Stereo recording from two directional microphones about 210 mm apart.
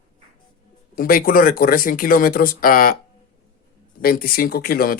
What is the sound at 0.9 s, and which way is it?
Speech, 45° left (ahead or behind).